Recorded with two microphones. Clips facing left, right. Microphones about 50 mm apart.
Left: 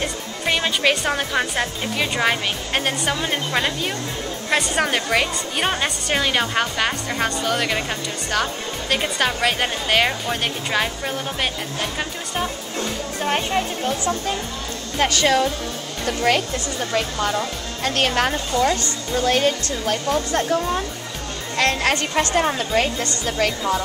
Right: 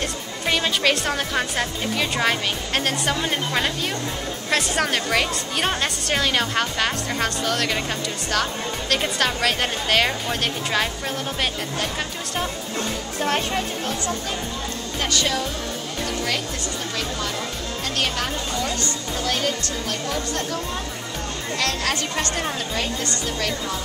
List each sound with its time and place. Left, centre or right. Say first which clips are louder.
0.0 s speech: left 2 dB; centre
13.2 s speech: left 1 dB; centre
15.0 s speech: left 6 dB; left
17.8 s speech: left 6 dB; left
19.2 s speech: left 6 dB; left
21.5 s a woman's voice: left 6 dB; left